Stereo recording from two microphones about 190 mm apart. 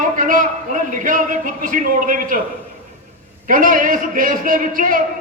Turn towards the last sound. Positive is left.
turn(degrees=-45)  # may be behind; listen again after turning